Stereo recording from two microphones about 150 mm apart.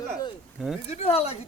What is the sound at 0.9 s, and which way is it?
Speech, 45° left (ahead or behind).